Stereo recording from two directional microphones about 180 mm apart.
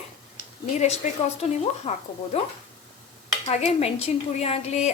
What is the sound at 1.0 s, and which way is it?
A woman's voice, 40° left (ahead or behind).